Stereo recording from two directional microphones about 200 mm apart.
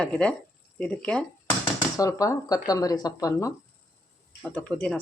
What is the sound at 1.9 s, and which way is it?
Speech, 15° left (ahead or behind).